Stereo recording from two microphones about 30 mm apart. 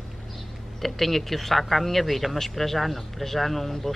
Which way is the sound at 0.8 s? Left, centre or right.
Centre.